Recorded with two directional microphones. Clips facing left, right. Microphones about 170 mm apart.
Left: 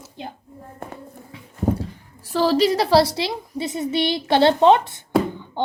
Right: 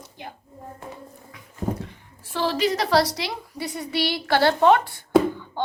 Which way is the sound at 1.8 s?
35° left (ahead or behind).